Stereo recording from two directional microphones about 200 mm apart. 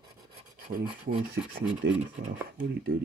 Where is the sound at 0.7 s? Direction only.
45° right (ahead or behind).